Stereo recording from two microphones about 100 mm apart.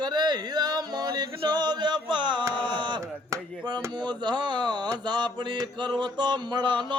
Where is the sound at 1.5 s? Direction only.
45° right (ahead or behind).